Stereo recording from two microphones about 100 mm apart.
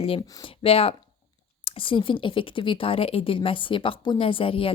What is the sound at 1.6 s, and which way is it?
Speech, 60° left (ahead or behind).